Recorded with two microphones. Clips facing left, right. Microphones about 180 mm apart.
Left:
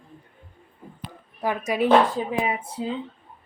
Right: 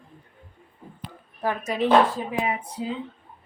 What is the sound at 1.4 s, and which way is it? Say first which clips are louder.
Speech: left 2 dB; 10° left (ahead or behind).